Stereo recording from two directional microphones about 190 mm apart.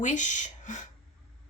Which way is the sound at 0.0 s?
40° left (ahead or behind).